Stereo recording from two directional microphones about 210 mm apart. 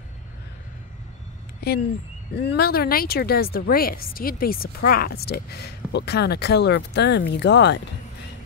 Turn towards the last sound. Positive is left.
turn(degrees=55)  # may be behind; listen again after turning